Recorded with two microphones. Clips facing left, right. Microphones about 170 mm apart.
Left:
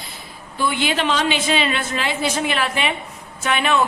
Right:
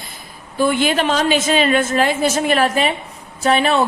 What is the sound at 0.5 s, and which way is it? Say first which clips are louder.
A woman's voice: right 5 dB; 45° right (ahead or behind).